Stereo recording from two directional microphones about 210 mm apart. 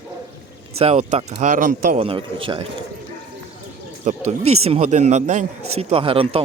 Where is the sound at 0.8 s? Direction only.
30° right (ahead or behind).